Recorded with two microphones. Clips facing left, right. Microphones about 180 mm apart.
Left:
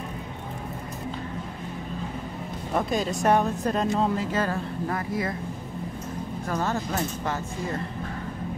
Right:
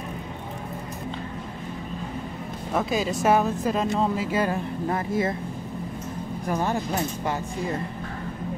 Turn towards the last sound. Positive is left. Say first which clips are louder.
# right 2 dB
turn(degrees=-15)  # may be behind; listen again after turning